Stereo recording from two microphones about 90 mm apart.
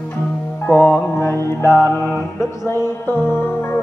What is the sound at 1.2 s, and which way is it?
Mantra, 30° left (ahead or behind).